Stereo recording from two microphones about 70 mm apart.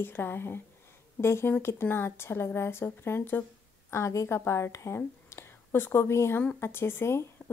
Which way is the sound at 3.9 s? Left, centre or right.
Left.